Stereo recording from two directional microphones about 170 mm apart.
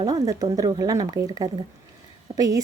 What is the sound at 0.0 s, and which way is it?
A woman's voice, 20° right (ahead or behind).